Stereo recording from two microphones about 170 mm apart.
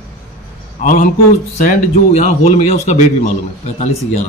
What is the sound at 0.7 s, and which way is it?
A man's voice, 50° left (ahead or behind).